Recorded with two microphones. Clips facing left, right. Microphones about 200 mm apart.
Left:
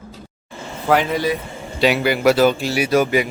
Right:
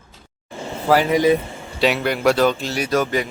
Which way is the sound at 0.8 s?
5° right (ahead or behind).